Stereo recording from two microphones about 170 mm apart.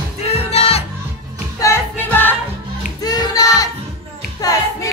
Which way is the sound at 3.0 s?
25° left (ahead or behind).